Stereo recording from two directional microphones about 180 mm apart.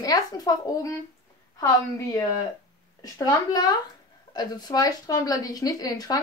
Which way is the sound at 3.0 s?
20° left (ahead or behind).